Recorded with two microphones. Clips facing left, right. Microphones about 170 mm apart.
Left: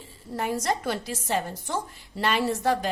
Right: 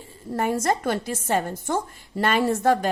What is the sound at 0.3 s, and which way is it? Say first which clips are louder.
A woman's voice: right 4 dB; 50° right (ahead or behind).